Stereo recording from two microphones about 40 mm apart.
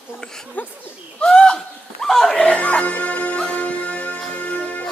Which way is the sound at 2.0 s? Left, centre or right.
Centre.